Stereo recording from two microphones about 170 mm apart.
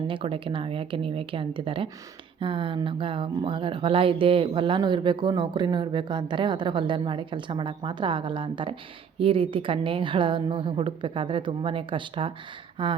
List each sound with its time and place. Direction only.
0.1 s a woman's voice: 30° right (ahead or behind)